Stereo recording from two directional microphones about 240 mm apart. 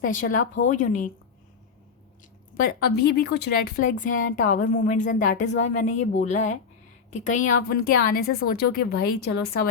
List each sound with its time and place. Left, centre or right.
0.0 s speech: left
2.6 s speech: left